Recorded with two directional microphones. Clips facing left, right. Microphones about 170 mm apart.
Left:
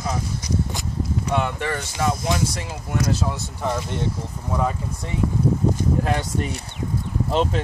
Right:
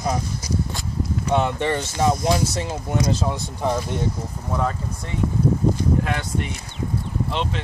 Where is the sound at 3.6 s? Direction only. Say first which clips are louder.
Right 2 dB; 10° right (ahead or behind).